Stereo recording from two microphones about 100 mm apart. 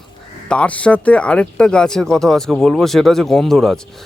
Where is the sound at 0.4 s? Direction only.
10° left (ahead or behind).